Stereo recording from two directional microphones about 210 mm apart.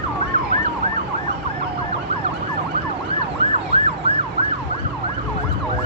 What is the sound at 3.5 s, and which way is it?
Emergency vehicle, 30° right (ahead or behind).